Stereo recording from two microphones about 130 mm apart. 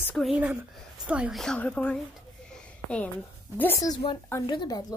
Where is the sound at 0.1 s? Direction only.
Centre (ahead or behind).